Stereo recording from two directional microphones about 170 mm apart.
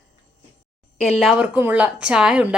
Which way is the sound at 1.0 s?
5° left (ahead or behind).